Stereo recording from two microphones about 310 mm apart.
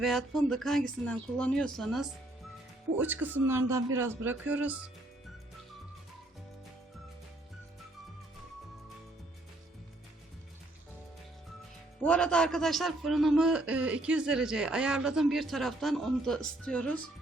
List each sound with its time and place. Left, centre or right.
0.0 s a man's voice: centre
12.0 s a man's voice: centre